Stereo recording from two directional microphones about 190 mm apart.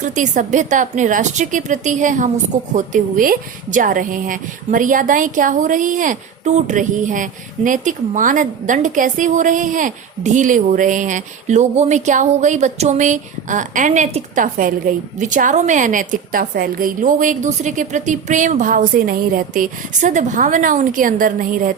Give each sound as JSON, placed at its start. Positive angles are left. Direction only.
{"t": 0.0, "sound": "a woman's voice", "side_deg": -40}